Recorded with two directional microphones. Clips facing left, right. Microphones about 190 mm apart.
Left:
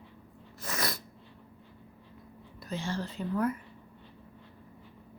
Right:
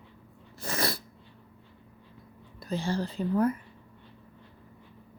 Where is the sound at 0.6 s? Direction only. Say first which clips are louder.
Right 4 dB; 30° right (ahead or behind).